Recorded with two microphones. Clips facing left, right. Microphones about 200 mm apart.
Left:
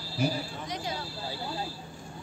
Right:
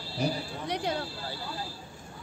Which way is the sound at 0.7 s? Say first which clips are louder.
Right 7 dB; 65° right (ahead or behind).